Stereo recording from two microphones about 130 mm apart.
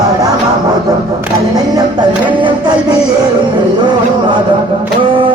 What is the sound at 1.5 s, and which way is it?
Music, 30° right (ahead or behind).